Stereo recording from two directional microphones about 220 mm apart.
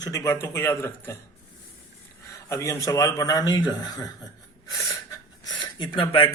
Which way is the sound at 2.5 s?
15° left (ahead or behind).